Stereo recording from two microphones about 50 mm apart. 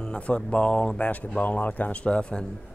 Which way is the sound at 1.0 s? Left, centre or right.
Left.